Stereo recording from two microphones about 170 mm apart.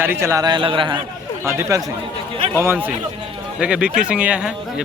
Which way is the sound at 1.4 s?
20° right (ahead or behind).